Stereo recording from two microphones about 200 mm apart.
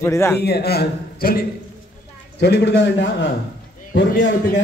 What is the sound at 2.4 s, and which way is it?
Speech, 60° left (ahead or behind).